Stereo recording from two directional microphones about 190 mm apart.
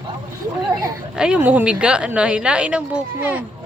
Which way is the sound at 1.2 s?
5° right (ahead or behind).